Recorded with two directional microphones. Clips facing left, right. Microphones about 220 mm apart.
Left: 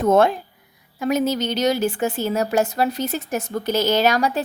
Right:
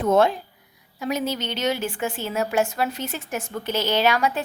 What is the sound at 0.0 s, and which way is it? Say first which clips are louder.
A woman's voice: left 3 dB; 50° left (ahead or behind).